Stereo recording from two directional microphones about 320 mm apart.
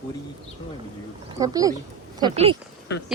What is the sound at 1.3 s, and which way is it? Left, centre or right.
Speech, centre.